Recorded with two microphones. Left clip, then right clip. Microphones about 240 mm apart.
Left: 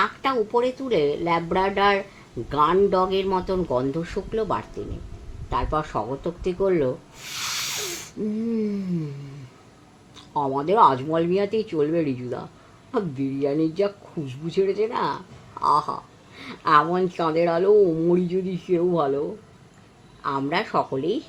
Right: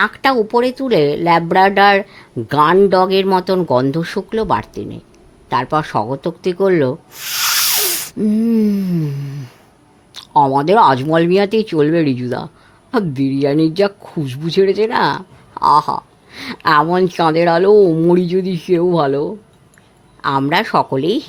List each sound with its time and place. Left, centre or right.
0.0 s speech: right
10.2 s speech: right